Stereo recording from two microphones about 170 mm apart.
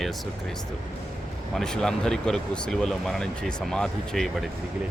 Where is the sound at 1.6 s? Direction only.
5° left (ahead or behind).